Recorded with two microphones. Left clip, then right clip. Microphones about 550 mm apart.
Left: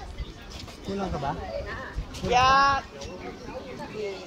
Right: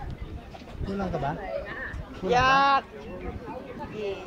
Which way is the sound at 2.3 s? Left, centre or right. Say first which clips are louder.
Left 1 dB; right.